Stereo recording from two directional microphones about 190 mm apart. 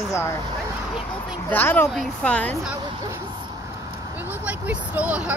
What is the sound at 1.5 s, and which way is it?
Speech, 10° left (ahead or behind).